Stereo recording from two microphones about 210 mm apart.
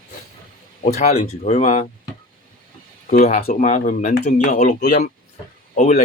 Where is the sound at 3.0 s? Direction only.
35° left (ahead or behind).